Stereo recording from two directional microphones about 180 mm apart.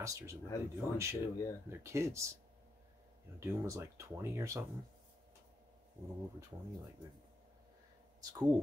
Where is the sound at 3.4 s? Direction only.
15° right (ahead or behind).